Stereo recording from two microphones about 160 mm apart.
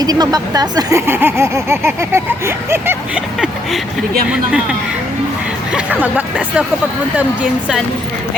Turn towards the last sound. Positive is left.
turn(degrees=-5)  # may be behind; listen again after turning